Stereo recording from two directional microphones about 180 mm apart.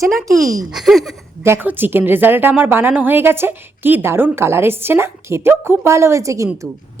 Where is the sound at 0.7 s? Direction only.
Centre (ahead or behind).